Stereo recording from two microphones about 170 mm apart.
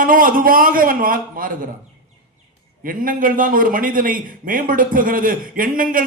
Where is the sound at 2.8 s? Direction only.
55° right (ahead or behind).